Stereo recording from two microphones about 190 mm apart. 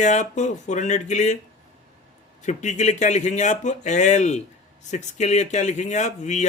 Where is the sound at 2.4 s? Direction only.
40° left (ahead or behind).